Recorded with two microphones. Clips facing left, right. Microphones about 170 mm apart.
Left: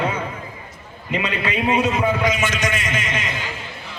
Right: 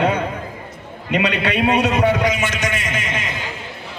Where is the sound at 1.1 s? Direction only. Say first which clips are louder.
Right 4 dB; 75° right (ahead or behind).